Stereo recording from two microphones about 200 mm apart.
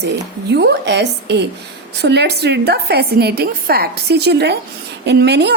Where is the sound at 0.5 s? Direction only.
60° right (ahead or behind).